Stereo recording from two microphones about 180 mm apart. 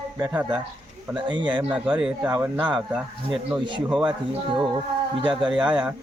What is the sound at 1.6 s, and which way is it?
Speech, 10° right (ahead or behind).